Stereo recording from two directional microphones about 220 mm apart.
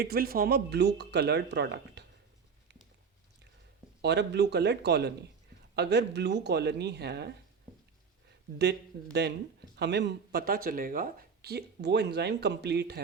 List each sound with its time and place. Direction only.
0.0 s speech: 45° right (ahead or behind)
4.0 s speech: 50° right (ahead or behind)
8.9 s speech: 45° right (ahead or behind)